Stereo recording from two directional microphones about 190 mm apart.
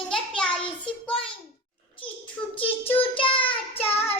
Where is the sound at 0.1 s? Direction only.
5° left (ahead or behind).